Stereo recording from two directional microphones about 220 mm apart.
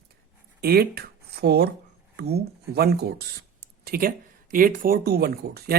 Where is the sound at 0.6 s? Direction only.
45° right (ahead or behind).